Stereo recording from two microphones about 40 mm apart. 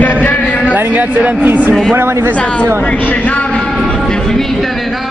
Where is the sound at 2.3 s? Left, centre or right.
Left.